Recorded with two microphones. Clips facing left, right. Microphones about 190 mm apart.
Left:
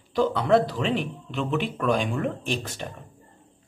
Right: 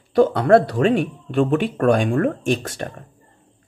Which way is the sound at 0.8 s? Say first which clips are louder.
Right 8 dB; 50° right (ahead or behind).